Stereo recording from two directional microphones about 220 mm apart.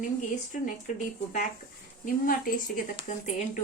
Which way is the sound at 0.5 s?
35° left (ahead or behind).